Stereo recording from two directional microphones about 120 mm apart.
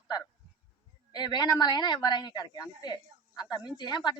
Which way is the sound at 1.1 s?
35° left (ahead or behind).